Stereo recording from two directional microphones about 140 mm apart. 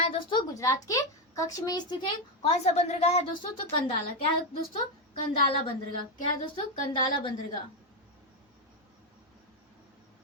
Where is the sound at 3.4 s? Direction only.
40° left (ahead or behind).